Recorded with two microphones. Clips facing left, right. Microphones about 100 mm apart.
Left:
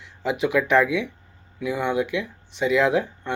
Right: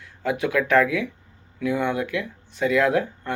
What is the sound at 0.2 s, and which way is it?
Speech, 20° left (ahead or behind).